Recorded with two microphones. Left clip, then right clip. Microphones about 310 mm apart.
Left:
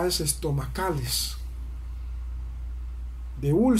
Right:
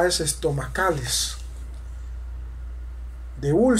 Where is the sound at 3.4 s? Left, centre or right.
Right.